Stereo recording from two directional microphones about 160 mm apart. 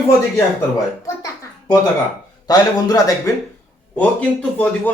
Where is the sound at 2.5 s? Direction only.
20° left (ahead or behind).